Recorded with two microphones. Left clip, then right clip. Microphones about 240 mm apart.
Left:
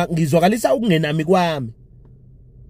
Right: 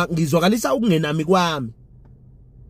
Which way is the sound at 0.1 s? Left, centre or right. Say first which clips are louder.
Left 2 dB; left.